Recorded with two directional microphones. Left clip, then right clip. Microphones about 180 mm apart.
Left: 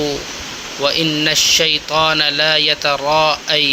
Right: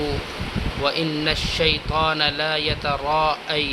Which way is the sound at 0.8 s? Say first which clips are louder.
Left 7 dB; 15° left (ahead or behind).